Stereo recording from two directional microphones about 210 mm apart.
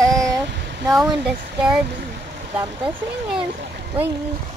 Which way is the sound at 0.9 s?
Centre (ahead or behind).